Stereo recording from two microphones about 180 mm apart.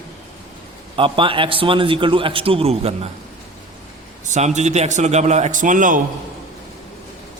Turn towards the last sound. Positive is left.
turn(degrees=-45)  # may be behind; listen again after turning